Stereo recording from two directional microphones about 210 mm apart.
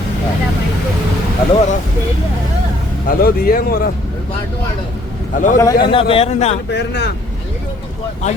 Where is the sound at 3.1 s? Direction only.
45° left (ahead or behind).